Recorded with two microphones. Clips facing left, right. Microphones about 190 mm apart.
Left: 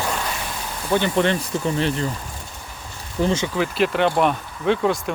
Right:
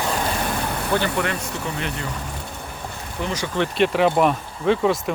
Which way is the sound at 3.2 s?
25° left (ahead or behind).